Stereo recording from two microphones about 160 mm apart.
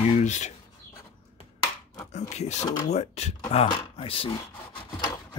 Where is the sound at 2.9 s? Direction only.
45° left (ahead or behind).